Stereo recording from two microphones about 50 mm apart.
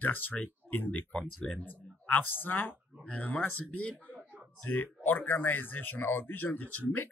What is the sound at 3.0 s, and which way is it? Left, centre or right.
A man's voice, left.